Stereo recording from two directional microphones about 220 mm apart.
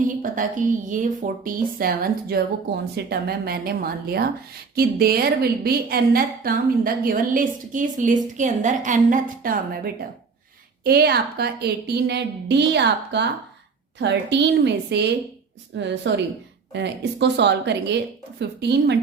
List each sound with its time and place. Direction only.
0.0 s a woman's voice: 35° right (ahead or behind)